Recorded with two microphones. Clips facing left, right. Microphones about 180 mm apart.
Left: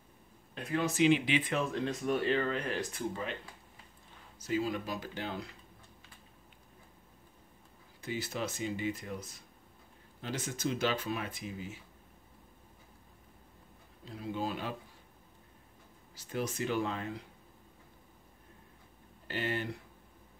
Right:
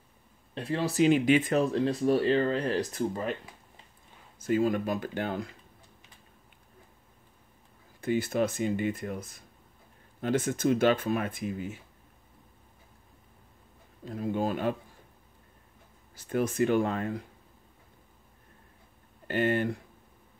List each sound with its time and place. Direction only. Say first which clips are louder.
0.6 s speech: right 4 dB; 30° right (ahead or behind)
4.4 s speech: right 7 dB; 50° right (ahead or behind)
8.0 s speech: right 10 dB; 55° right (ahead or behind)
14.0 s speech: right 7 dB; 50° right (ahead or behind)
16.2 s speech: right 8 dB; 55° right (ahead or behind)
19.2 s speech: right 9 dB; 55° right (ahead or behind)